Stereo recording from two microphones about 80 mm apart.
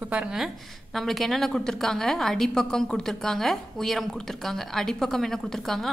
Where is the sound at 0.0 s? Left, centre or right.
Centre.